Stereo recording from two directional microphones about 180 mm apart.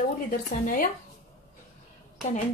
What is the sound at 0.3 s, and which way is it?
Speech, 50° left (ahead or behind).